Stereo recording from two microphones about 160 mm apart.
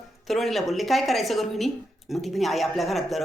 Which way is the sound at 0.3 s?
Centre (ahead or behind).